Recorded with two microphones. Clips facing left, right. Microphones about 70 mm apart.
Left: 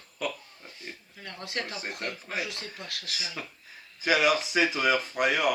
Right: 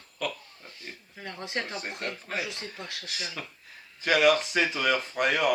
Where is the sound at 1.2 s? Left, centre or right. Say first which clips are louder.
Right 2 dB; right.